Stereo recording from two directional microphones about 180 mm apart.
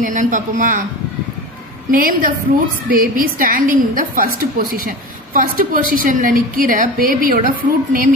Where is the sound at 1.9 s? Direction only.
50° right (ahead or behind).